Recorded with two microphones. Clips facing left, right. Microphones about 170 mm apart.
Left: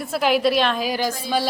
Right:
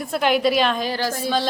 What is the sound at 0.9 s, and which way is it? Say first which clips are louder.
Speech: even; 15° left (ahead or behind).